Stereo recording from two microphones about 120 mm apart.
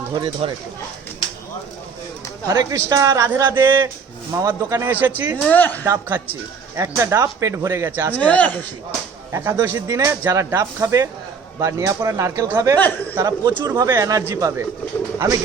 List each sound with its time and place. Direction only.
0.1 s speech: 35° right (ahead or behind)
2.5 s speech: 30° right (ahead or behind)
4.9 s speech: 15° right (ahead or behind)
5.5 s speech: 15° left (ahead or behind)
6.7 s speech: 25° right (ahead or behind)
8.1 s speech: 15° left (ahead or behind)
9.3 s speech: 20° right (ahead or behind)